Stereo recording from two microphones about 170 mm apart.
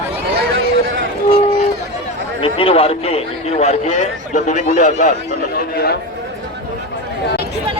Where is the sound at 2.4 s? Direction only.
35° left (ahead or behind).